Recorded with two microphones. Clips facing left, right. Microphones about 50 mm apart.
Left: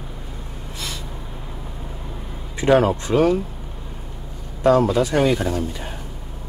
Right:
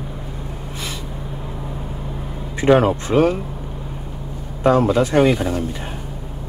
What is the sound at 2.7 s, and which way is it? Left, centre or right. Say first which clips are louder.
Speech: right 2 dB; centre.